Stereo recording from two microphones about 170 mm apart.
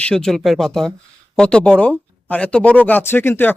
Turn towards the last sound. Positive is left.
turn(degrees=10)  # may be behind; listen again after turning